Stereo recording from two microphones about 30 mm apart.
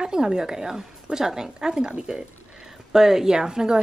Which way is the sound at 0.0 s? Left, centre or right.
Right.